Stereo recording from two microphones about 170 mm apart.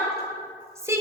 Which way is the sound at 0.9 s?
15° right (ahead or behind).